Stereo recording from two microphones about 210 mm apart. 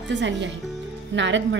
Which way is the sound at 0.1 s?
60° right (ahead or behind).